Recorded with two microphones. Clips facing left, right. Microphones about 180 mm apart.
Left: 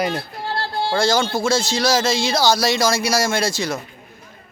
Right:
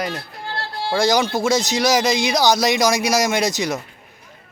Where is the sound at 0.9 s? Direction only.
15° right (ahead or behind).